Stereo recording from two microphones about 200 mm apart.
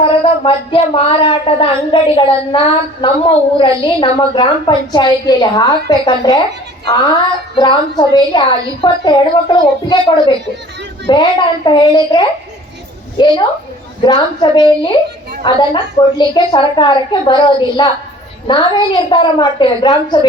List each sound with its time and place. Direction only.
0.0 s speech: 25° left (ahead or behind)
7.5 s speech: 20° left (ahead or behind)
11.0 s speech: 25° left (ahead or behind)